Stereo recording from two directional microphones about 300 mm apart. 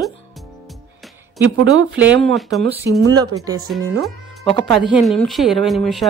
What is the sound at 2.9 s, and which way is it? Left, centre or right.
Speech, right.